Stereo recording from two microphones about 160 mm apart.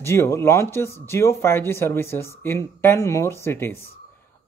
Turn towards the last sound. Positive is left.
turn(degrees=15)  # may be behind; listen again after turning